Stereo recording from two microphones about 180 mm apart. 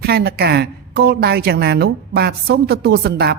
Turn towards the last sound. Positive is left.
turn(degrees=-65)  # may be behind; listen again after turning